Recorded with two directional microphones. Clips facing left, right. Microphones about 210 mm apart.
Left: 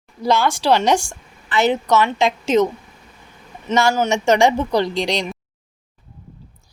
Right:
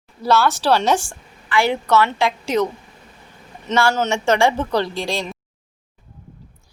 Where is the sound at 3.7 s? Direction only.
15° left (ahead or behind).